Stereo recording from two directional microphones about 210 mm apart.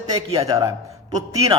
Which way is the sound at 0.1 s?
20° right (ahead or behind).